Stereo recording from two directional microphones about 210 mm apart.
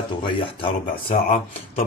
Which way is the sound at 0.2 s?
25° left (ahead or behind).